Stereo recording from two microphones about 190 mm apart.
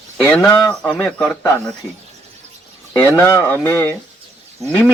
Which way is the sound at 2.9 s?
15° left (ahead or behind).